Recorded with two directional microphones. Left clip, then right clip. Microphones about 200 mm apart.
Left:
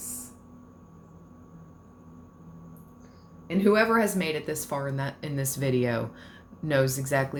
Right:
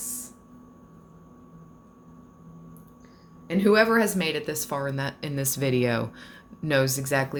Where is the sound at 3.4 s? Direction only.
25° right (ahead or behind).